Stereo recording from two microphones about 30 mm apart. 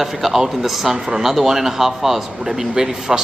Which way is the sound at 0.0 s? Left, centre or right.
Centre.